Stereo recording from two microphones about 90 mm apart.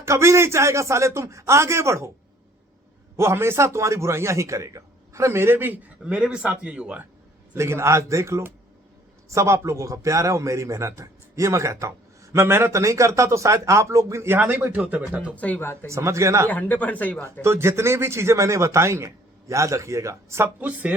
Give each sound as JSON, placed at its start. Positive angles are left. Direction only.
{"t": 0.0, "sound": "a man's voice", "side_deg": -30}
{"t": 3.2, "sound": "a man's voice", "side_deg": -30}
{"t": 7.5, "sound": "a man's voice", "side_deg": -30}
{"t": 14.3, "sound": "speech", "side_deg": -20}
{"t": 15.4, "sound": "speech", "side_deg": 15}
{"t": 15.9, "sound": "a man's voice", "side_deg": -35}
{"t": 16.5, "sound": "speech", "side_deg": 20}
{"t": 17.4, "sound": "a man's voice", "side_deg": -30}
{"t": 20.6, "sound": "speech", "side_deg": -15}